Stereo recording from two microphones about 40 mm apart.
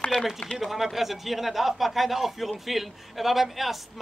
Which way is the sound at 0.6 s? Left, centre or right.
Centre.